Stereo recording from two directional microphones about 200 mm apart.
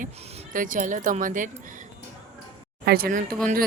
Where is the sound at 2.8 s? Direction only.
50° right (ahead or behind).